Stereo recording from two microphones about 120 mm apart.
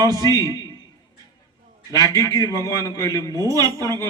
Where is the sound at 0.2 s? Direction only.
30° left (ahead or behind).